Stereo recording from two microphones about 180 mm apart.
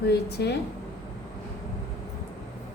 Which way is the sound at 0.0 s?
65° left (ahead or behind).